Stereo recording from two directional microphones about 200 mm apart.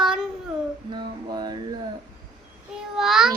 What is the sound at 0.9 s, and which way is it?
Music, 20° right (ahead or behind).